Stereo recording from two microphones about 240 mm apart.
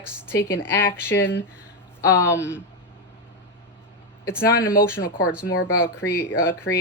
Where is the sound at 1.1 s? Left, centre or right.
Left.